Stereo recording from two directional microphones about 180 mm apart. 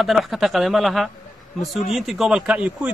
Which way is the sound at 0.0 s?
Centre (ahead or behind).